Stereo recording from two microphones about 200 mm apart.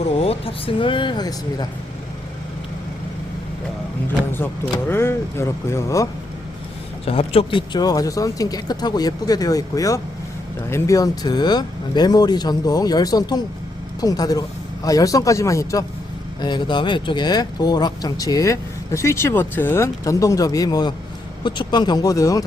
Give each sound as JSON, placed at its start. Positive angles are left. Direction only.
{"t": 0.0, "sound": "speech", "side_deg": 30}
{"t": 4.3, "sound": "speech", "side_deg": 10}
{"t": 7.0, "sound": "speech", "side_deg": 30}